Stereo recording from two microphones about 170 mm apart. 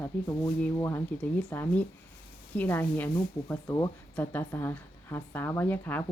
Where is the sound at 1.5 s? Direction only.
10° left (ahead or behind).